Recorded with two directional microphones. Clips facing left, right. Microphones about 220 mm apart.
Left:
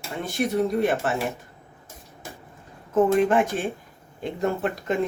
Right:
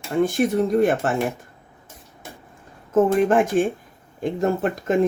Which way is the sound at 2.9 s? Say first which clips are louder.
Right 2 dB; 45° right (ahead or behind).